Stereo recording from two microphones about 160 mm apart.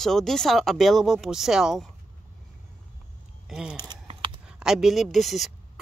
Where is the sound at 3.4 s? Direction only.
5° right (ahead or behind).